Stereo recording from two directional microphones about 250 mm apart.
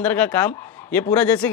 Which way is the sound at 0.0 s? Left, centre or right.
Centre.